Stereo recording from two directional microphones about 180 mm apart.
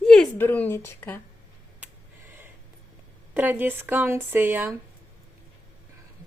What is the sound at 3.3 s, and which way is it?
A woman's voice, 10° right (ahead or behind).